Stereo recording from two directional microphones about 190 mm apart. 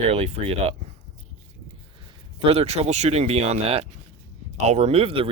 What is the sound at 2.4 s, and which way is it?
Speech, 30° right (ahead or behind).